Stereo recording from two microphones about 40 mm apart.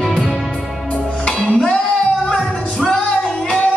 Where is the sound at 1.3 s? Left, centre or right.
Centre.